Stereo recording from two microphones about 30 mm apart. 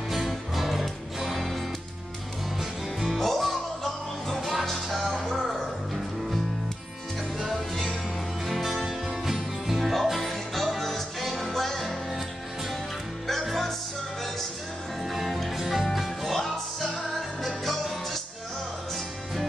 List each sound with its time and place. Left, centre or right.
0.6 s music: centre
3.1 s music: centre
4.4 s music: centre
5.4 s music: centre
7.5 s music: centre
9.8 s music: centre
12.1 s music: centre
13.5 s music: centre
15.0 s music: centre